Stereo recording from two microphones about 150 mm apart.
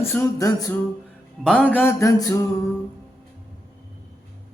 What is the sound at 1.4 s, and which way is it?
Music, 5° left (ahead or behind).